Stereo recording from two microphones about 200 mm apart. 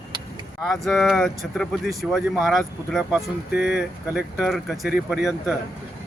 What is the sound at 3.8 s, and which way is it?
Speech, 5° right (ahead or behind).